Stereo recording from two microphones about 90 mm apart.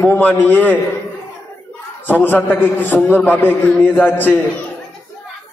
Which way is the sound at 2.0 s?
20° left (ahead or behind).